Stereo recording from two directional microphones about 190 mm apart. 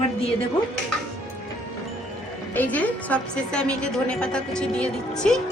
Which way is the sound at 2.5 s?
10° left (ahead or behind).